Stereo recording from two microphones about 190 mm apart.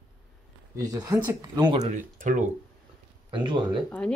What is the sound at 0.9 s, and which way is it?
Speech, 20° right (ahead or behind).